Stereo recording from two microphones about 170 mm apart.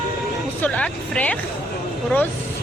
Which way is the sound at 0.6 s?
10° left (ahead or behind).